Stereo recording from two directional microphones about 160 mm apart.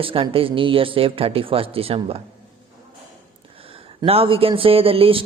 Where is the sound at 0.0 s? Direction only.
35° right (ahead or behind).